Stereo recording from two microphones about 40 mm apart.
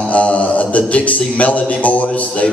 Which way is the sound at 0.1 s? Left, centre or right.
Left.